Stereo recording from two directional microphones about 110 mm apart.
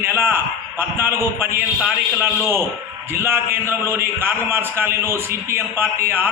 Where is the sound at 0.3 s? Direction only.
20° right (ahead or behind).